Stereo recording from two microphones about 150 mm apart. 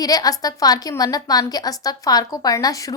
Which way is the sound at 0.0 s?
25° left (ahead or behind).